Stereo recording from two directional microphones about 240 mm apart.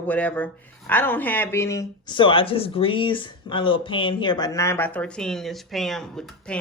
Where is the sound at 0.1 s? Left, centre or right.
Centre.